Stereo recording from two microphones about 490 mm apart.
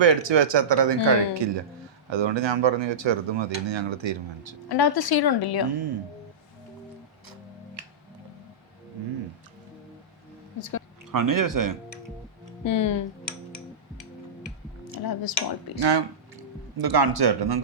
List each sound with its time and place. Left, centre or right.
0.0 s speech: right
4.7 s a woman's voice: left
10.6 s speech: left
11.1 s speech: right
12.6 s speech: left
15.0 s a woman's voice: left
15.8 s speech: right